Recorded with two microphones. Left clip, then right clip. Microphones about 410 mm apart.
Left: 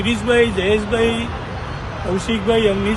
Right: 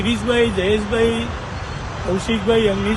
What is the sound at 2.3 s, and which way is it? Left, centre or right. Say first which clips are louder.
Speech: left 1 dB; centre.